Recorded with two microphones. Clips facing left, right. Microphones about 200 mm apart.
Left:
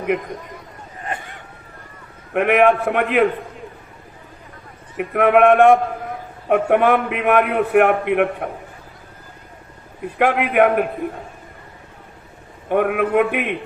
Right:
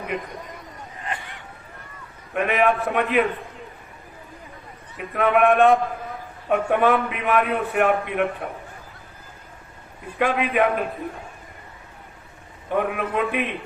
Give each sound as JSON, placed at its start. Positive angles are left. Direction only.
{"t": 1.0, "sound": "vehicle", "side_deg": 45}
{"t": 2.3, "sound": "a man's voice", "side_deg": 65}
{"t": 4.9, "sound": "a man's voice", "side_deg": 70}
{"t": 10.2, "sound": "a man's voice", "side_deg": 65}
{"t": 12.6, "sound": "a man's voice", "side_deg": 60}